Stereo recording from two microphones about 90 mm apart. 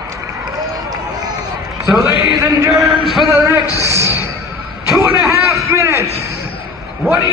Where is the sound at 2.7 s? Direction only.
Centre (ahead or behind).